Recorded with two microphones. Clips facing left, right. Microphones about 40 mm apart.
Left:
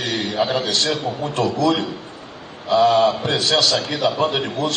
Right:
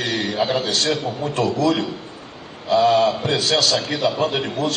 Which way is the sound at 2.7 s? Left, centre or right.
Left.